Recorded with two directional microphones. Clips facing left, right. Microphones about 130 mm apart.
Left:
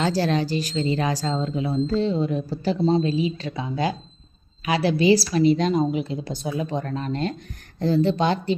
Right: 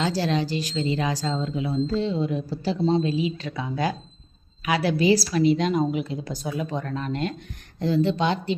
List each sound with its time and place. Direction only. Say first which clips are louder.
0.0 s a woman's voice: left 2 dB; 45° left (ahead or behind)